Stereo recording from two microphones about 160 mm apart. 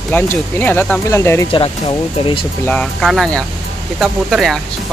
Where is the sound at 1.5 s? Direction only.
30° left (ahead or behind).